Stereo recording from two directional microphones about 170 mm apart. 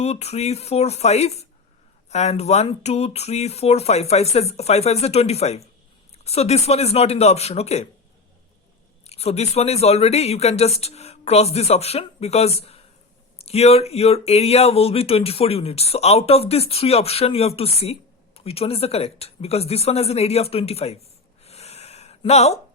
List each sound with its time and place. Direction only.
0.0 s speech: 40° left (ahead or behind)
9.0 s speech: 40° left (ahead or behind)
21.4 s a sound: 40° left (ahead or behind)